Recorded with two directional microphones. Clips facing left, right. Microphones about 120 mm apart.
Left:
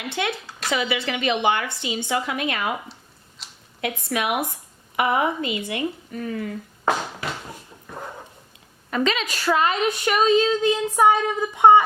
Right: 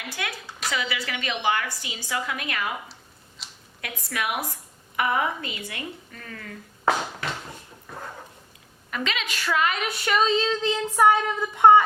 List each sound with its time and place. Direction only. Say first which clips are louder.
0.1 s a woman's voice: left 8 dB; 25° left (ahead or behind)
2.9 s a sound: even; centre (ahead or behind)
3.8 s a woman's voice: left 6 dB; 20° left (ahead or behind)
6.8 s a sound: even; 5° left (ahead or behind)
8.9 s a woman's voice: left 7 dB; 40° left (ahead or behind)
9.8 s child singing: left 4 dB; 20° left (ahead or behind)